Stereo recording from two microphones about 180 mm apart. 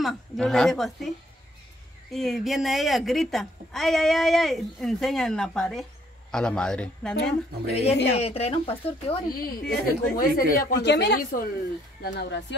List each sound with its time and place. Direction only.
0.0 s a woman's voice: centre (ahead or behind)
2.1 s a woman's voice: centre (ahead or behind)
7.7 s speech: 35° left (ahead or behind)
9.3 s a woman's voice: 55° left (ahead or behind); by 12.5 s 70° left (ahead or behind)